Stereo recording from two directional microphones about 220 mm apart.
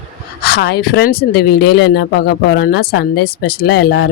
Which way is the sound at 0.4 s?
45° left (ahead or behind).